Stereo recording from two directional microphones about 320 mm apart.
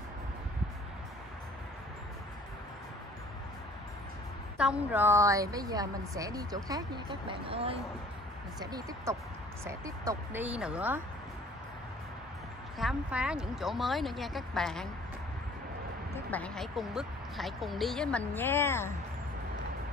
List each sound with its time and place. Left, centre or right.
4.6 s a woman's voice: centre
12.7 s speech: centre
16.3 s speech: centre